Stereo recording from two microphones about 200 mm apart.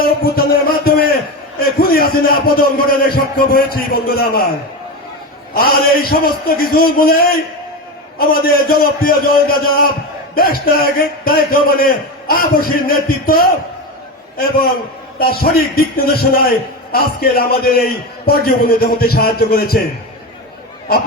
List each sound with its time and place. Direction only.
0.0 s a sound: 50° left (ahead or behind)
1.6 s a man's voice: 50° left (ahead or behind)
5.5 s a man's voice: 45° left (ahead or behind)
15.2 s a man's voice: 50° left (ahead or behind)